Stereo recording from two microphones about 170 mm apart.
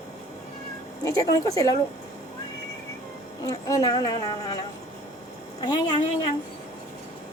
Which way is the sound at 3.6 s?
20° left (ahead or behind).